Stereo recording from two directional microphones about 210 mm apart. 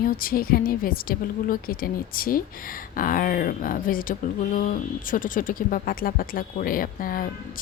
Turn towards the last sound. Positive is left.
turn(degrees=40)  # may be behind; listen again after turning